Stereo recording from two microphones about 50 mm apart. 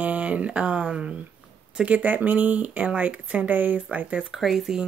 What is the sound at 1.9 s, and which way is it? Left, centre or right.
Speech, right.